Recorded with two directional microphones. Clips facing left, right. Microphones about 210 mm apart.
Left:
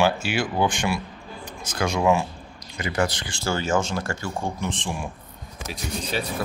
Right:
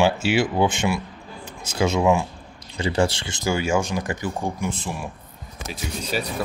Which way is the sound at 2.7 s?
30° right (ahead or behind).